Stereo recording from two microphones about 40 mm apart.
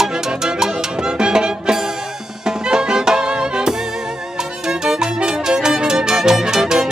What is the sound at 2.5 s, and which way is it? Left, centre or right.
Music, centre.